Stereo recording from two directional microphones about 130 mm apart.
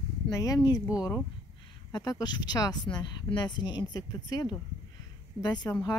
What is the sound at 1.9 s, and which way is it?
Speech, 30° left (ahead or behind).